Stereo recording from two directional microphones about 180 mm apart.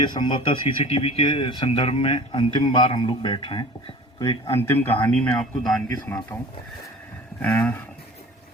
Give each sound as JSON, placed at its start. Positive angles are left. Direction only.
{"t": 0.0, "sound": "speech", "side_deg": 25}
{"t": 4.5, "sound": "a man's voice", "side_deg": 15}